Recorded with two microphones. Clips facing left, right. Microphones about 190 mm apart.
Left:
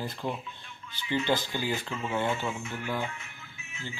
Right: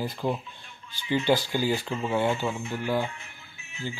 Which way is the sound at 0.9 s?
30° right (ahead or behind).